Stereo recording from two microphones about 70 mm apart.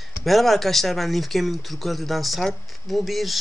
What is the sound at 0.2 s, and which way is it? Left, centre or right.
Speech, centre.